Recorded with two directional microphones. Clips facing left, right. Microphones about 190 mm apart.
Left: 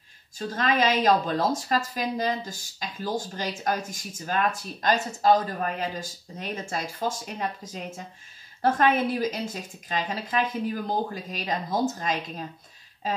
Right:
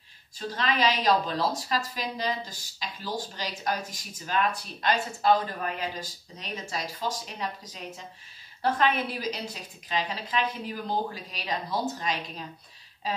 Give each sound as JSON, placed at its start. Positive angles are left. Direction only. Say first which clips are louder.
{"t": 0.4, "sound": "speech", "louder": "left 3 dB", "side_deg": 45}